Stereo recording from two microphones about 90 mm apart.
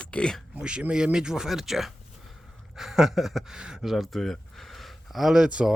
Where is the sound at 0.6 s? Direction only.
10° right (ahead or behind).